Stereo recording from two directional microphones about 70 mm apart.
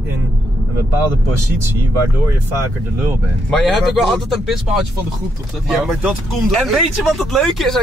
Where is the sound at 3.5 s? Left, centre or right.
Centre.